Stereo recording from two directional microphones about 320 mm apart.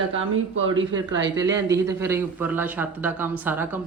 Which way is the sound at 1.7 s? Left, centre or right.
Centre.